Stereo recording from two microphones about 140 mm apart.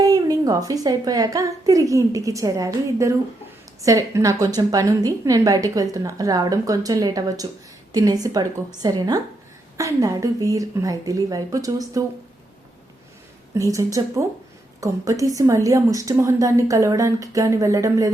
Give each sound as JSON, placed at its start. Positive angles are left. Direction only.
{"t": 0.0, "sound": "a woman's voice", "side_deg": -25}
{"t": 13.5, "sound": "a woman's voice", "side_deg": -20}